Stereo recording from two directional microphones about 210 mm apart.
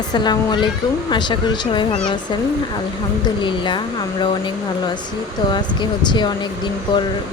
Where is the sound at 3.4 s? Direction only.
20° left (ahead or behind).